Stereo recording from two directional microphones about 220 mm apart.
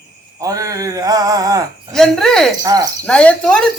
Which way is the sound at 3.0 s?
5° left (ahead or behind).